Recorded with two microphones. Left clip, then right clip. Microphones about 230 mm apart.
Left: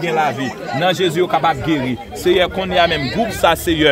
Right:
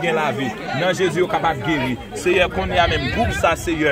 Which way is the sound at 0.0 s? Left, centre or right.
Left.